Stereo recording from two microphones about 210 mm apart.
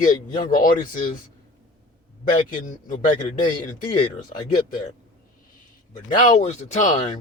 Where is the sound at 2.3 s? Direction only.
40° left (ahead or behind).